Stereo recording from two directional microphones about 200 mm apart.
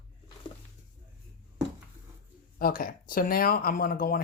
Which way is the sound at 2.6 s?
45° left (ahead or behind).